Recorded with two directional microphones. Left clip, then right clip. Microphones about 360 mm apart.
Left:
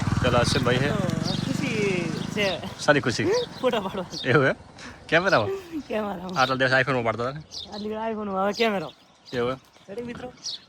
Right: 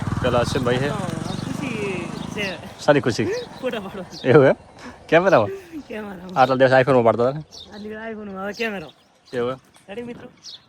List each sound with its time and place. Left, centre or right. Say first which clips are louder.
0.0 s speech: right 2 dB; centre
0.9 s vehicle: even; centre
2.7 s speech: right 5 dB; centre
3.2 s speech: left 2 dB; centre
4.2 s speech: right 8 dB; centre
5.5 s speech: left 2 dB; centre
6.2 s a man's voice: right 8 dB; centre
7.9 s speech: left 3 dB; centre
9.3 s speech: right 2 dB; centre